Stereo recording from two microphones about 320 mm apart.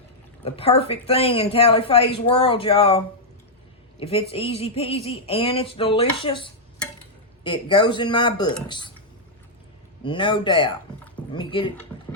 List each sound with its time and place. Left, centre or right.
0.4 s a woman's voice: centre
10.0 s speech: centre